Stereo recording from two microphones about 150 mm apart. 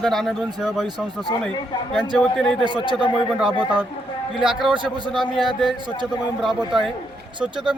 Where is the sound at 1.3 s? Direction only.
25° left (ahead or behind).